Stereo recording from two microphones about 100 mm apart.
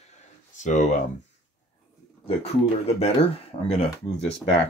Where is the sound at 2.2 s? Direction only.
90° left.